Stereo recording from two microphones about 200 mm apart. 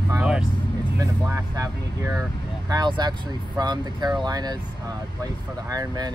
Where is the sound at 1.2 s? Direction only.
15° right (ahead or behind).